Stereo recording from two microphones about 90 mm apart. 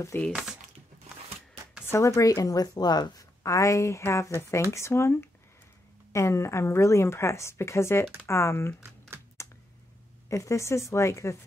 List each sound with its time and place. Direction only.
0.3 s speech: 5° right (ahead or behind)
1.9 s a woman's voice: 35° left (ahead or behind)
9.4 s a sound: 30° left (ahead or behind)
10.3 s a woman's voice: 35° left (ahead or behind)